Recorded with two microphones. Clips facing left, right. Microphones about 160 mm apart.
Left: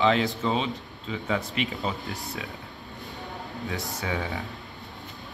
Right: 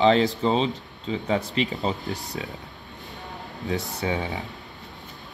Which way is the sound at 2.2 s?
40° right (ahead or behind).